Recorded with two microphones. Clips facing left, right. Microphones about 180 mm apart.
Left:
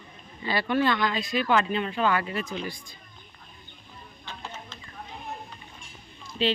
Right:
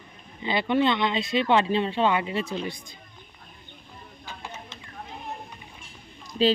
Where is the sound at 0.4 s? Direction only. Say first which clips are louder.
Right 2 dB; 20° right (ahead or behind).